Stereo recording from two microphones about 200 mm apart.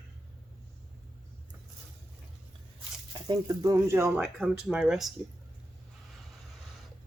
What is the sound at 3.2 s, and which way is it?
Speech, 20° right (ahead or behind).